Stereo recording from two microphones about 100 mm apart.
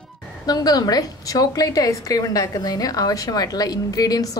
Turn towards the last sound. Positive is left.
turn(degrees=35)  # may be behind; listen again after turning